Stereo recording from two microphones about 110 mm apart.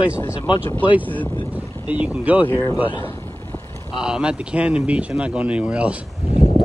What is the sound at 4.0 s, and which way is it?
Speech, 5° right (ahead or behind).